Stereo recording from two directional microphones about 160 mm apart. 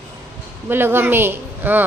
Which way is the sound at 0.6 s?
15° right (ahead or behind).